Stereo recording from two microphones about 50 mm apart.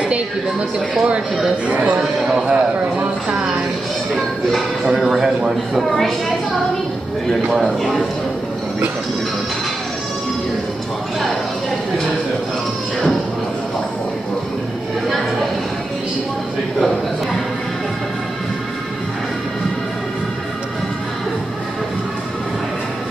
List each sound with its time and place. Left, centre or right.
0.1 s a woman's voice: right
2.0 s speech: centre
2.5 s a woman's voice: right
4.1 s speech: centre
7.5 s speech: centre